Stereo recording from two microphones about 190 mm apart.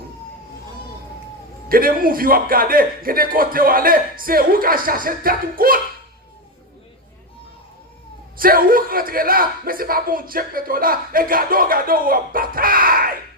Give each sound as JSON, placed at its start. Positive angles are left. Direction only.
{"t": 1.7, "sound": "a man's voice", "side_deg": -50}
{"t": 8.4, "sound": "a man's voice", "side_deg": -50}